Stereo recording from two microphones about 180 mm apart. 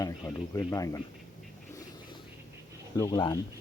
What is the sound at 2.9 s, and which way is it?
Speech, 20° left (ahead or behind).